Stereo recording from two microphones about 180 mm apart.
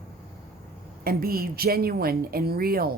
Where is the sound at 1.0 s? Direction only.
55° right (ahead or behind).